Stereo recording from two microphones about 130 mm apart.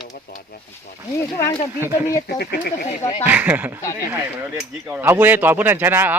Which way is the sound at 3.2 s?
15° right (ahead or behind).